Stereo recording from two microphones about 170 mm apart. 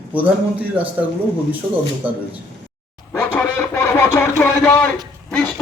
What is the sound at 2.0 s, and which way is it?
Speech, 10° right (ahead or behind).